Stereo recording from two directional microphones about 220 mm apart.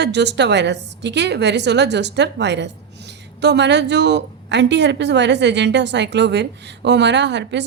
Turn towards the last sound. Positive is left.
turn(degrees=-55)  # may be behind; listen again after turning